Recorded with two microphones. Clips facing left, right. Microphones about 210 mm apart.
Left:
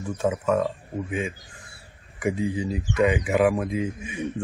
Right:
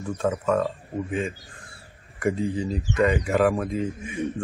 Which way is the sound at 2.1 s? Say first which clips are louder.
Right 1 dB; centre (ahead or behind).